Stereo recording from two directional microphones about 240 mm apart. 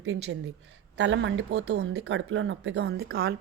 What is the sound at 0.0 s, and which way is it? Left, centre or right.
Speech, right.